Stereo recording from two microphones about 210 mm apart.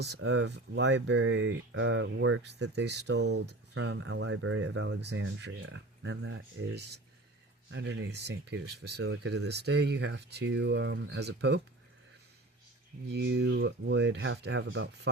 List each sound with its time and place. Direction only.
0.0 s speech: 55° right (ahead or behind)
13.1 s speech: 55° right (ahead or behind)